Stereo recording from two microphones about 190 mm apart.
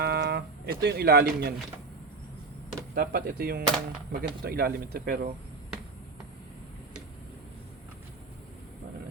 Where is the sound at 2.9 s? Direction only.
55° right (ahead or behind).